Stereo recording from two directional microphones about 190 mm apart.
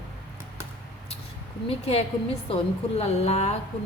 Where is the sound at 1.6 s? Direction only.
30° left (ahead or behind).